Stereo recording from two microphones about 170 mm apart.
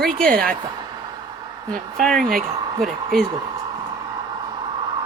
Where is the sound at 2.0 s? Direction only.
Centre (ahead or behind).